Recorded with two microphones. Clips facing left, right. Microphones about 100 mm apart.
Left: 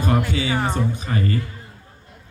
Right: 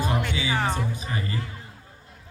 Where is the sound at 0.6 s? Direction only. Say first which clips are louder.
Left 3 dB; 15° left (ahead or behind).